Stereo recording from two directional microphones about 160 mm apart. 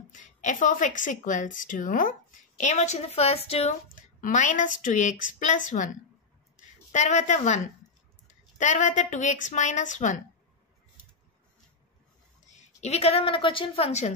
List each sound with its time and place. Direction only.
0.1 s speech: 50° left (ahead or behind)
3.9 s speech: 55° left (ahead or behind)
6.9 s speech: 50° left (ahead or behind)
12.5 s a woman's voice: 40° left (ahead or behind)